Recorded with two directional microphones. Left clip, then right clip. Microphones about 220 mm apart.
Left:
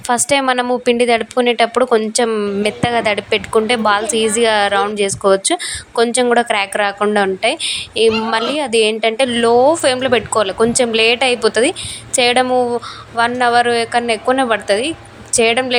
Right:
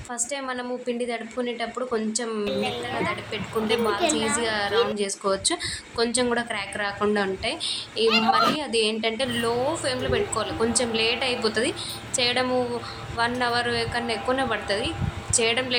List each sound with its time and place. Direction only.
0.1 s a woman's voice: 45° left (ahead or behind)